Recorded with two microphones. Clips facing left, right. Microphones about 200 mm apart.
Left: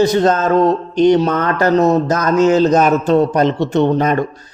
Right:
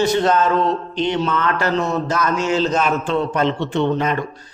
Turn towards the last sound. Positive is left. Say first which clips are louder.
# left 5 dB
turn(degrees=40)  # may be behind; listen again after turning